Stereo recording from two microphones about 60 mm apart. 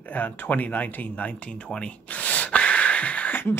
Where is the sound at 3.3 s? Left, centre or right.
Left.